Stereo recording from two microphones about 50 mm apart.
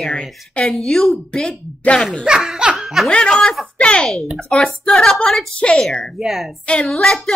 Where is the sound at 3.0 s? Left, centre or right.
Centre.